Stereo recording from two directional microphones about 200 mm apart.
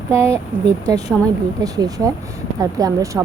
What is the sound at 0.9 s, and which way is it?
A woman's voice, 20° right (ahead or behind).